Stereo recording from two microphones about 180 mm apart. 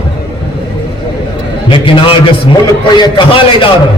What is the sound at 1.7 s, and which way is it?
A man's voice, 30° left (ahead or behind).